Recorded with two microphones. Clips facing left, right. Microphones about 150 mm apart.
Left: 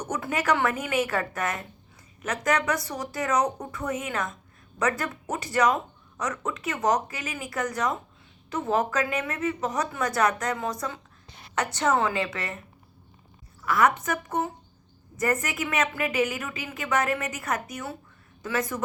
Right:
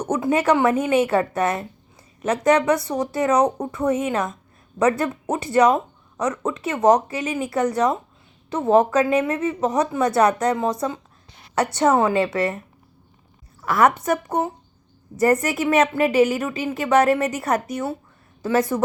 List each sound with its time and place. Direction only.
0.1 s a woman's voice: 25° right (ahead or behind)
13.6 s a woman's voice: 40° right (ahead or behind)